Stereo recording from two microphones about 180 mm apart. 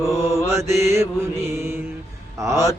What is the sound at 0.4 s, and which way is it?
Mantra, 15° right (ahead or behind).